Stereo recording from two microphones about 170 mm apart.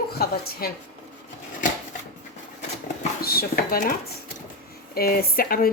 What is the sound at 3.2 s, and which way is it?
Speech, 60° left (ahead or behind).